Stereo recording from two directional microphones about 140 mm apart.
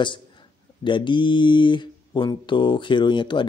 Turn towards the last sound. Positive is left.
turn(degrees=35)  # may be behind; listen again after turning